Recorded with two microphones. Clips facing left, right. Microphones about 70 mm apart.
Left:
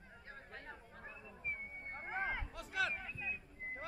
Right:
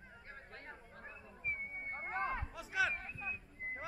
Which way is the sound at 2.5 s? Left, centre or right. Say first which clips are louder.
Right 3 dB; centre.